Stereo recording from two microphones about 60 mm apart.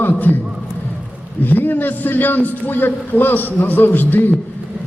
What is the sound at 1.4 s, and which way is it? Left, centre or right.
A man's voice, left.